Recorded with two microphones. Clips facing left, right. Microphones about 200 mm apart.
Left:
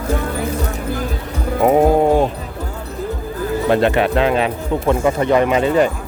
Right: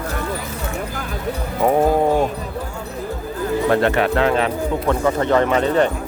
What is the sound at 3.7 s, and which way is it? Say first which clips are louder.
Speech: left 3 dB; 20° left (ahead or behind).